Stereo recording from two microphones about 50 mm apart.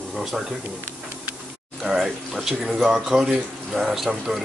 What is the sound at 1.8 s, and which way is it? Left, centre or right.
Speech, centre.